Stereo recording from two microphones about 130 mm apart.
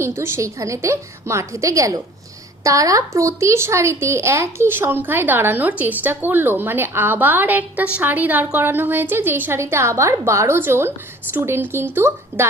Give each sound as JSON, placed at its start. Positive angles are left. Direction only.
{"t": 0.0, "sound": "a woman's voice", "side_deg": -20}